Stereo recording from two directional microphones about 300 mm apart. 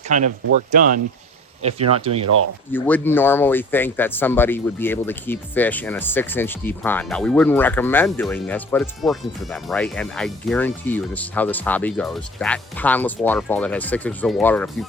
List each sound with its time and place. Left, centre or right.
0.1 s speech: right
2.2 s speech: right
2.7 s speech: centre